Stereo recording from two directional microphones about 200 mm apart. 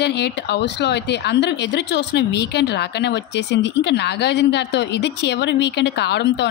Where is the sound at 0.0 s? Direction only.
55° left (ahead or behind).